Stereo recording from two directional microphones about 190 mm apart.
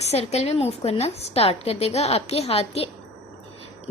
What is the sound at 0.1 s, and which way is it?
A woman's voice, 35° left (ahead or behind).